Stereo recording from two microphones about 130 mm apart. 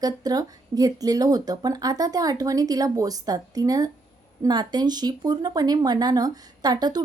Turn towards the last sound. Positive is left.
turn(degrees=-30)  # may be behind; listen again after turning